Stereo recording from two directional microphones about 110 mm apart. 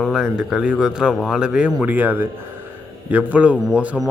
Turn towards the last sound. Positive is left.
turn(degrees=-10)  # may be behind; listen again after turning